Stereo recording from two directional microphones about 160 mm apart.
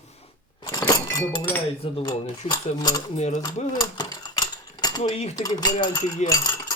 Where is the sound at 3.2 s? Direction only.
45° left (ahead or behind).